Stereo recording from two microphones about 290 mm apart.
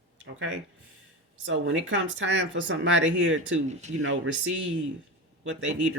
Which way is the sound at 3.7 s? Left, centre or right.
Right.